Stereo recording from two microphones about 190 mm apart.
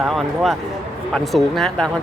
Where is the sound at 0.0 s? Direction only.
Centre (ahead or behind).